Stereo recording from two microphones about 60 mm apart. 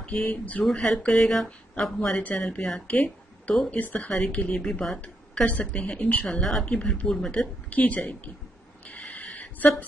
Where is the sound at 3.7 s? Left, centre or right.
Left.